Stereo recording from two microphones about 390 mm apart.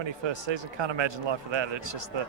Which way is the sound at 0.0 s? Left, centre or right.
Right.